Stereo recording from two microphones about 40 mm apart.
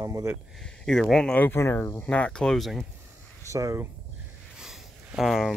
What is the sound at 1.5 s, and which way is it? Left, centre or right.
Speech, left.